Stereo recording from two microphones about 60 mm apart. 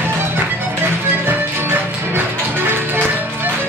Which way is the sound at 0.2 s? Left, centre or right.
Right.